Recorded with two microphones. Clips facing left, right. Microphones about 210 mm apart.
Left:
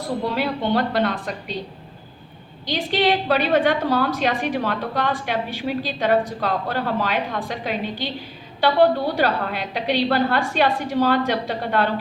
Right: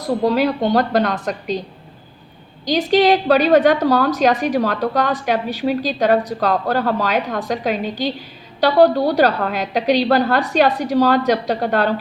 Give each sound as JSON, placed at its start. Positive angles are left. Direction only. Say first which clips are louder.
{"t": 0.0, "sound": "a woman's voice", "louder": "right 7 dB", "side_deg": -40}
{"t": 2.6, "sound": "a woman's voice", "louder": "right 7 dB", "side_deg": -40}